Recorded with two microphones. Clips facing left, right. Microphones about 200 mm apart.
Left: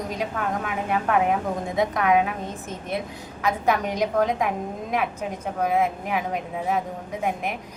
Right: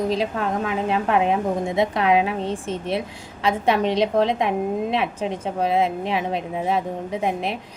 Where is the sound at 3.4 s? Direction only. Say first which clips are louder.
Right 3 dB; 30° right (ahead or behind).